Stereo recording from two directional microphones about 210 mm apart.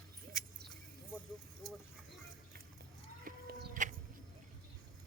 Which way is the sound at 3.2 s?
40° right (ahead or behind).